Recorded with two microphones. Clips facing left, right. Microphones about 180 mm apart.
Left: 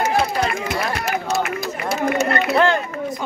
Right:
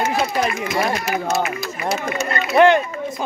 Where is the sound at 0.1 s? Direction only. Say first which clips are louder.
Left 1 dB; 60° left (ahead or behind).